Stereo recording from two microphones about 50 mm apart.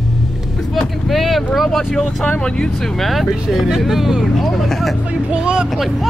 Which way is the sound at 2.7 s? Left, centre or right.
Centre.